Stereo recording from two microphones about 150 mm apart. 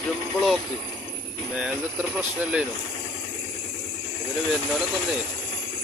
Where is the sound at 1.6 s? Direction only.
10° right (ahead or behind).